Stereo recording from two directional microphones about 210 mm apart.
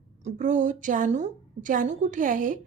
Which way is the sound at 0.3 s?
35° right (ahead or behind).